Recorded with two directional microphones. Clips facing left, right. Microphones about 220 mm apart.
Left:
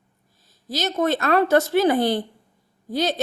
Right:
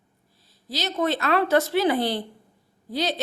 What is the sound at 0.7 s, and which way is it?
Speech, 45° left (ahead or behind).